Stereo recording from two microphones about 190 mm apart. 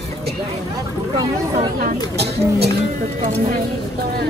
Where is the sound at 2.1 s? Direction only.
60° right (ahead or behind).